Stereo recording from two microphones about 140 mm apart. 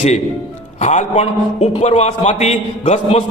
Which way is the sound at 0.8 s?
55° left (ahead or behind).